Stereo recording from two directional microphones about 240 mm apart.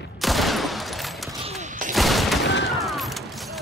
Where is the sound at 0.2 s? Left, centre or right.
Centre.